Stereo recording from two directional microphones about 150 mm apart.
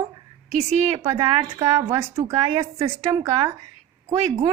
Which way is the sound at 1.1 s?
35° right (ahead or behind).